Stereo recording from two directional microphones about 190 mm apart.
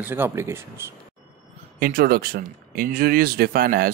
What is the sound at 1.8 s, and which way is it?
Speech, 50° right (ahead or behind).